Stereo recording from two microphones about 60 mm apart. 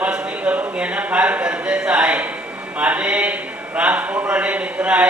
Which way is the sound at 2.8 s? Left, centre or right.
Right.